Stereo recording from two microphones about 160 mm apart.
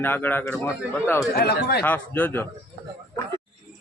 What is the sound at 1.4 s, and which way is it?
Speech, 80° left.